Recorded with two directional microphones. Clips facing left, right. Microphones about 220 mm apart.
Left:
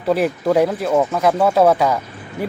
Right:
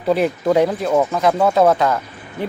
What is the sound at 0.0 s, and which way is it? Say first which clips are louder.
Speech: even; centre (ahead or behind).